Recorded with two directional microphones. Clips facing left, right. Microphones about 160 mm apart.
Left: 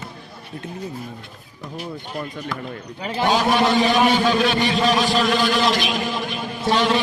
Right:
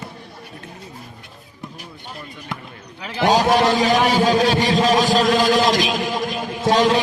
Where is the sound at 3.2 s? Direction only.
40° right (ahead or behind).